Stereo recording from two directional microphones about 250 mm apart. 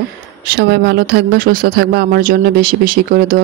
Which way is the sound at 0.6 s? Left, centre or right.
Right.